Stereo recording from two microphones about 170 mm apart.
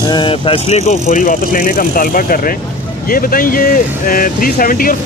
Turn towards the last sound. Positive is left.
turn(degrees=55)  # may be behind; listen again after turning